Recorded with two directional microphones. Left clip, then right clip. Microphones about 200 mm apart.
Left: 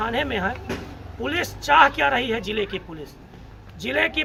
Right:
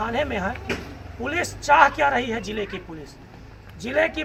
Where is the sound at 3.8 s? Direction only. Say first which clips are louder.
Even; 15° left (ahead or behind).